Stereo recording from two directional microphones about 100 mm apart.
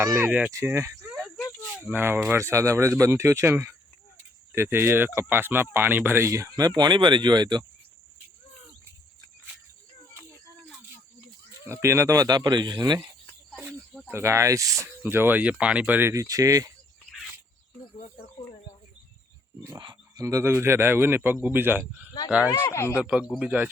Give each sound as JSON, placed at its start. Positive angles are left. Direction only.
{"t": 0.3, "sound": "speech", "side_deg": -10}
{"t": 0.5, "sound": "speech", "side_deg": -30}
{"t": 11.6, "sound": "speech", "side_deg": -25}
{"t": 14.1, "sound": "speech", "side_deg": -25}
{"t": 14.8, "sound": "speech", "side_deg": -20}
{"t": 16.1, "sound": "speech", "side_deg": -35}
{"t": 19.8, "sound": "wild animals", "side_deg": -50}
{"t": 20.2, "sound": "speech", "side_deg": -25}
{"t": 22.4, "sound": "speech", "side_deg": 25}
{"t": 23.0, "sound": "speech", "side_deg": -10}